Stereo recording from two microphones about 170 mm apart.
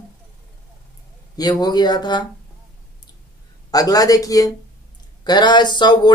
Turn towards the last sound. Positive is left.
turn(degrees=25)  # may be behind; listen again after turning